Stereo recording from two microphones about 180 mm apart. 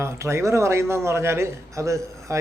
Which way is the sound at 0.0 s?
15° right (ahead or behind).